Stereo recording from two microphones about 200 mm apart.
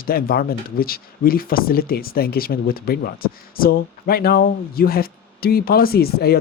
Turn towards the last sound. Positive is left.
turn(degrees=50)  # may be behind; listen again after turning